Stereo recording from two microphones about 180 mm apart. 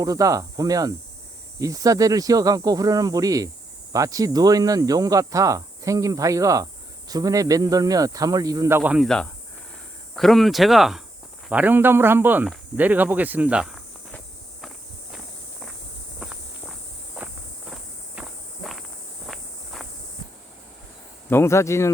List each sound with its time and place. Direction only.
0.0 s speech: 20° right (ahead or behind)
9.0 s speech: 5° left (ahead or behind)
17.2 s walk: 5° right (ahead or behind)
21.2 s speech: 15° left (ahead or behind)